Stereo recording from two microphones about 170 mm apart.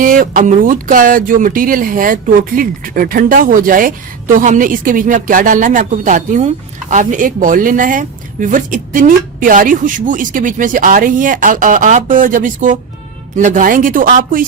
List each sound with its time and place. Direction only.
0.0 s speech: 55° right (ahead or behind)